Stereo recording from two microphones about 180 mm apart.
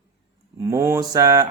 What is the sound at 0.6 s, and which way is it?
Speech, 15° right (ahead or behind).